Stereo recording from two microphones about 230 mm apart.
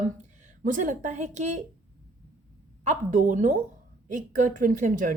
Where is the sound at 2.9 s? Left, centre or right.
Right.